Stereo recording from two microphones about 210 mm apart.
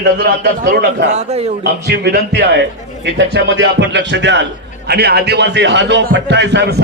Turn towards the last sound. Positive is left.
turn(degrees=-55)  # may be behind; listen again after turning